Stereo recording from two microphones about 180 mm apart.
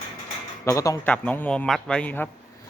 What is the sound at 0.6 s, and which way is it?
A man's voice, 15° left (ahead or behind).